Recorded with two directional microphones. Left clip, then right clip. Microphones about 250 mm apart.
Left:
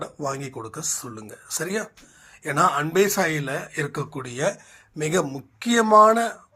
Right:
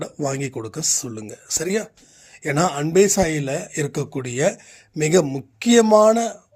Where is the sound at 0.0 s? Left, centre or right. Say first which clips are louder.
Right 4 dB; right.